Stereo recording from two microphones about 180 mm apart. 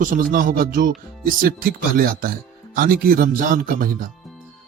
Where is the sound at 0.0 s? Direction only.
50° right (ahead or behind).